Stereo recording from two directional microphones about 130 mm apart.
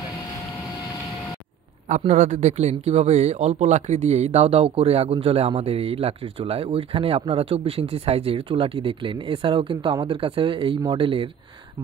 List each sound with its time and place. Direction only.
1.9 s a man's voice: 65° right (ahead or behind); by 11.2 s 40° right (ahead or behind)